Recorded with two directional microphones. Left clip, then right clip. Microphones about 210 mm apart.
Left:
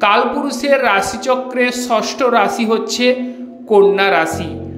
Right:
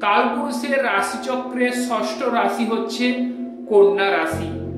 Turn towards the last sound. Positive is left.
turn(degrees=45)  # may be behind; listen again after turning